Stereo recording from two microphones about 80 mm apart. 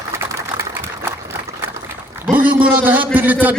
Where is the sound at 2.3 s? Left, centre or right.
Right.